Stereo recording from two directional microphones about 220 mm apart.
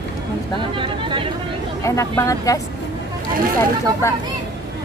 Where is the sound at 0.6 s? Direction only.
20° right (ahead or behind).